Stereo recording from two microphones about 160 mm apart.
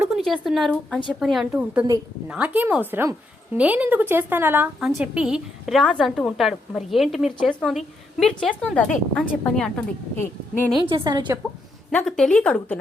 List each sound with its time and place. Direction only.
0.2 s a woman's voice: centre (ahead or behind)
10.8 s a woman's voice: 30° right (ahead or behind)
11.9 s a woman's voice: 5° left (ahead or behind)